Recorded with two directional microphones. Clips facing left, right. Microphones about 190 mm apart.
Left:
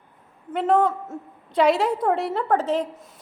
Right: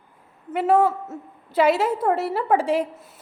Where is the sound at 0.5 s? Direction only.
5° right (ahead or behind).